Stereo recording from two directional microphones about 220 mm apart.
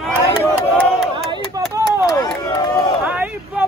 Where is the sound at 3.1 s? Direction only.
5° right (ahead or behind).